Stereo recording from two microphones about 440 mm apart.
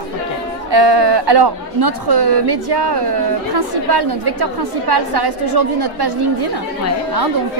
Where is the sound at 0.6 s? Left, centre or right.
Right.